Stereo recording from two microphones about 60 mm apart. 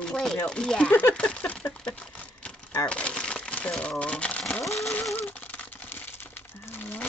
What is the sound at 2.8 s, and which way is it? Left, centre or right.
Crumpling, centre.